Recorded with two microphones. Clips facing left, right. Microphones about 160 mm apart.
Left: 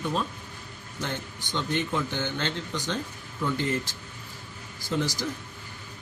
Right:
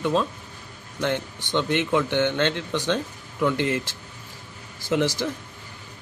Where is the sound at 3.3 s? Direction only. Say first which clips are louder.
Right 5 dB; 75° right (ahead or behind).